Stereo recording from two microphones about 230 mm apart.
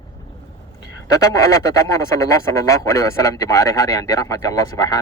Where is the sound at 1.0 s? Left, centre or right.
Centre.